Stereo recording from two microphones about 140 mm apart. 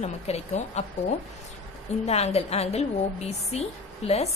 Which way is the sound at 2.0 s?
50° left (ahead or behind).